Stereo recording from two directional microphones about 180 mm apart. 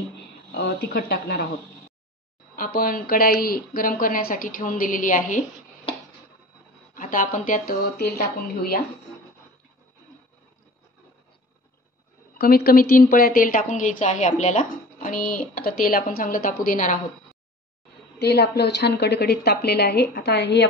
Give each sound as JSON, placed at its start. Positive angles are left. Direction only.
{"t": 0.5, "sound": "a woman's voice", "side_deg": 65}
{"t": 2.5, "sound": "a woman's voice", "side_deg": 50}
{"t": 6.9, "sound": "a woman's voice", "side_deg": 50}
{"t": 12.4, "sound": "a woman's voice", "side_deg": 60}
{"t": 18.2, "sound": "a woman's voice", "side_deg": 65}